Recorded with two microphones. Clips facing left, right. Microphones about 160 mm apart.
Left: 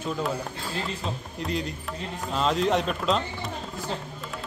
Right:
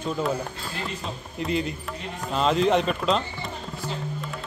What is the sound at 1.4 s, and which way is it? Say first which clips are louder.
Speech: right 4 dB; 5° right (ahead or behind).